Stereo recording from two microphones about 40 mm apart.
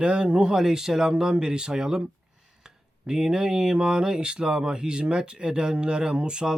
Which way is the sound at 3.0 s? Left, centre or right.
Centre.